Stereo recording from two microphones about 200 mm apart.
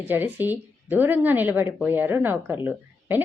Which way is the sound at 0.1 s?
10° right (ahead or behind).